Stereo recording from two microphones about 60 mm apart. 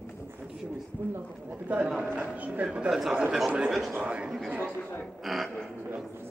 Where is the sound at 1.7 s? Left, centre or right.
Right.